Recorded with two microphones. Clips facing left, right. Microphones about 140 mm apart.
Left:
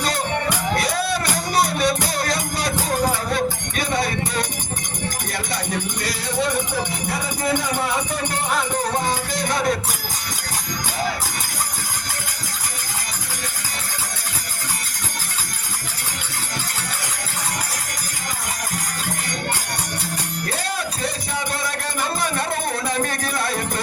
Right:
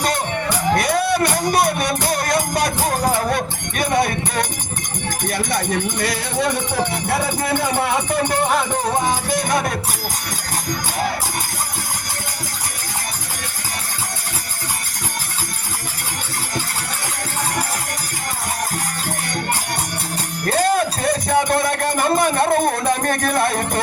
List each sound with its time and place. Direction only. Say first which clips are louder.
0.8 s music: right 5 dB; 55° right (ahead or behind)
9.3 s music: right 2 dB; 50° right (ahead or behind)
20.7 s a sound: right 7 dB; 55° right (ahead or behind)